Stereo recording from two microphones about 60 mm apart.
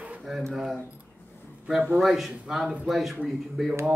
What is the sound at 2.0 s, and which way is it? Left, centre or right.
Speech, centre.